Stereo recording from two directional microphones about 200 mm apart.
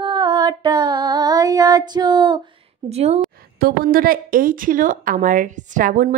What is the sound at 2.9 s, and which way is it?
Speech, 30° right (ahead or behind).